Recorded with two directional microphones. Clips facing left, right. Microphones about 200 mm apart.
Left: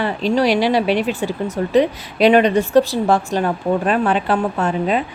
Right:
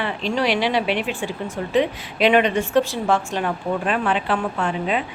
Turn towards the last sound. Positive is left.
turn(degrees=40)  # may be behind; listen again after turning